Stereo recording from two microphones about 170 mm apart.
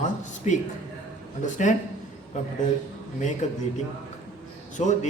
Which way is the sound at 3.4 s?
45° left (ahead or behind).